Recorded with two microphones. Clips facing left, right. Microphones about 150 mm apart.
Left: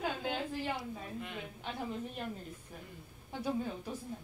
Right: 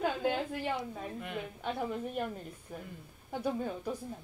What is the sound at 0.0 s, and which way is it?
A woman's voice, 55° right (ahead or behind).